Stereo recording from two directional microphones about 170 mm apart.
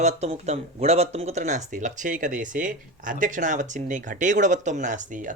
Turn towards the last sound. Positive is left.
turn(degrees=-50)  # may be behind; listen again after turning